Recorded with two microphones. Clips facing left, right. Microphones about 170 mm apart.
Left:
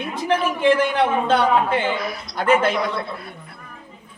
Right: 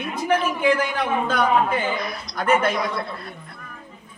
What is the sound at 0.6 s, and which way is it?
A man's voice, 25° left (ahead or behind).